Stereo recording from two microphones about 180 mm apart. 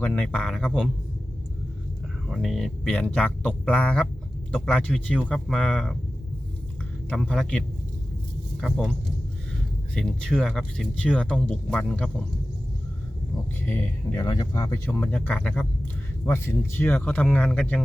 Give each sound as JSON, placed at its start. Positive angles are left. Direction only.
{"t": 0.0, "sound": "speech", "side_deg": 10}
{"t": 2.3, "sound": "speech", "side_deg": 0}
{"t": 7.1, "sound": "speech", "side_deg": 5}
{"t": 9.9, "sound": "speech", "side_deg": 5}
{"t": 13.6, "sound": "speech", "side_deg": 10}